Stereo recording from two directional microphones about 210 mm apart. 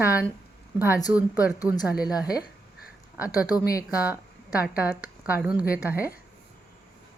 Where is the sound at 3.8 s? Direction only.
5° right (ahead or behind).